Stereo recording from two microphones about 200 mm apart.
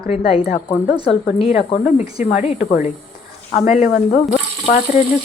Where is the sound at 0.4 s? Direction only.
45° left (ahead or behind).